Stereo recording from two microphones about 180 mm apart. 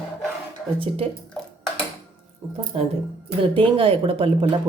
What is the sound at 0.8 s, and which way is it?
Speech, 30° right (ahead or behind).